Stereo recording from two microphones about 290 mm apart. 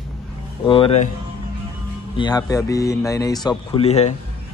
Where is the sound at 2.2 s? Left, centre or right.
Centre.